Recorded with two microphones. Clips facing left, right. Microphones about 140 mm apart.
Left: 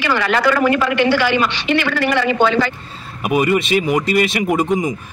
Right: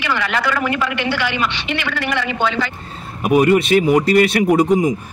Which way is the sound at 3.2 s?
10° left (ahead or behind).